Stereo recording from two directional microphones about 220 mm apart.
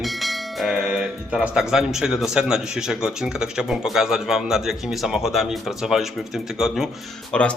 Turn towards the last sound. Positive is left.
turn(degrees=5)  # may be behind; listen again after turning